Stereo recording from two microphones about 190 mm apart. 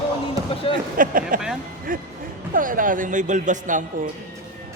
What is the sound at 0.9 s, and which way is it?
A man's voice, 45° right (ahead or behind).